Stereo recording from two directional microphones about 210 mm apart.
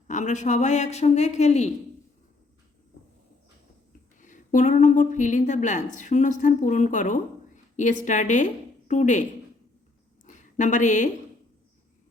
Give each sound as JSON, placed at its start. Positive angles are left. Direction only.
{"t": 0.1, "sound": "a woman's voice", "side_deg": 35}
{"t": 4.2, "sound": "a woman's voice", "side_deg": 35}
{"t": 10.2, "sound": "a sound", "side_deg": 35}